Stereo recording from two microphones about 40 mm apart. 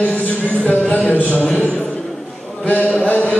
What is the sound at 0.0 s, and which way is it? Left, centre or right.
Music, left.